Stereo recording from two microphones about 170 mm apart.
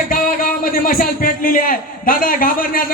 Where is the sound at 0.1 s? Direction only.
55° left (ahead or behind).